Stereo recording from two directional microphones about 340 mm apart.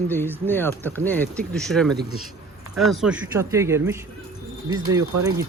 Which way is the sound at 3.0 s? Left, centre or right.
Centre.